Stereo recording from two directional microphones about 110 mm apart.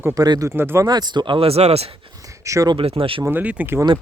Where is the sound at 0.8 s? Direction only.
40° right (ahead or behind); by 1.9 s 70° right (ahead or behind).